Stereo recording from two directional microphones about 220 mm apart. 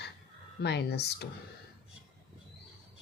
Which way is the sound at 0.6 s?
50° left (ahead or behind).